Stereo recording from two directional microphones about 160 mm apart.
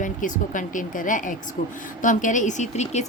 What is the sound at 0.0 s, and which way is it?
A woman's voice, 55° left (ahead or behind).